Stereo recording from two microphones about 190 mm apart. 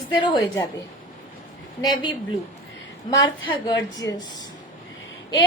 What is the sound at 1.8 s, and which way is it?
Speech, 25° left (ahead or behind).